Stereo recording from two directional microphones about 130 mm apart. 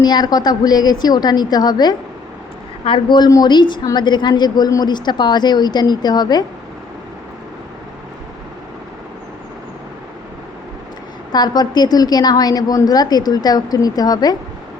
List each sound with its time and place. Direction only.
0.0 s a woman's voice: 35° left (ahead or behind)
11.3 s a woman's voice: 30° left (ahead or behind)